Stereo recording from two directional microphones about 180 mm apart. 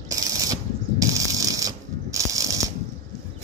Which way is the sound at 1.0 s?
20° right (ahead or behind).